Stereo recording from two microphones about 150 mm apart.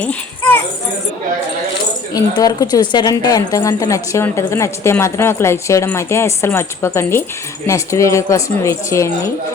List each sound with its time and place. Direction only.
0.0 s speech: 10° left (ahead or behind)
2.1 s a woman's voice: 25° left (ahead or behind)